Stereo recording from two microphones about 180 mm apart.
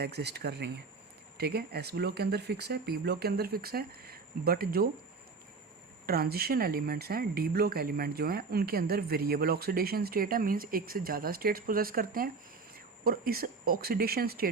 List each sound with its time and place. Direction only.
0.0 s speech: 65° right (ahead or behind)
6.1 s speech: 60° right (ahead or behind)